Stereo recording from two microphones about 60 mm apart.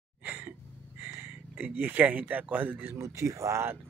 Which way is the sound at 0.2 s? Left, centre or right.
Right.